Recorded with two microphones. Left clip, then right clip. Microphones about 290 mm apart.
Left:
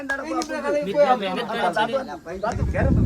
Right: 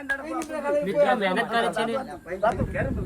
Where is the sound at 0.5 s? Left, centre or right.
Left.